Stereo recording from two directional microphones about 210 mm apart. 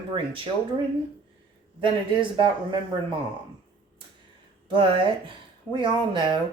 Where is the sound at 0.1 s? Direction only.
25° right (ahead or behind).